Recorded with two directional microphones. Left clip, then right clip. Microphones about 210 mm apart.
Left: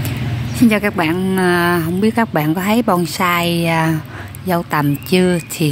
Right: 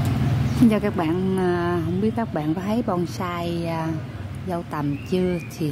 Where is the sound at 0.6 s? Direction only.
10° left (ahead or behind).